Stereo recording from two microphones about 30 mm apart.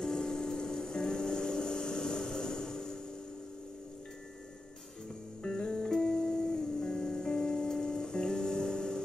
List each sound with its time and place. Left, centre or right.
0.0 s vehicle: centre
5.4 s music: left